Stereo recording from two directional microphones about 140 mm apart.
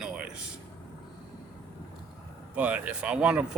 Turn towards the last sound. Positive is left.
turn(degrees=-5)  # may be behind; listen again after turning